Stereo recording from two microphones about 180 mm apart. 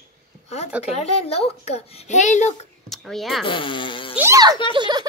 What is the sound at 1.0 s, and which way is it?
A child's voice, 35° left (ahead or behind).